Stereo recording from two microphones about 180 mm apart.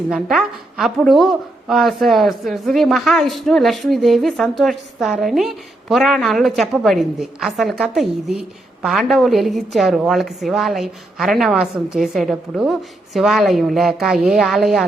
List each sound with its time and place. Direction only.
0.1 s a woman's voice: centre (ahead or behind)